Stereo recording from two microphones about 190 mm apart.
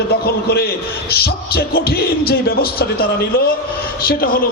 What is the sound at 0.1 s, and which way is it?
A man's voice, 60° left (ahead or behind).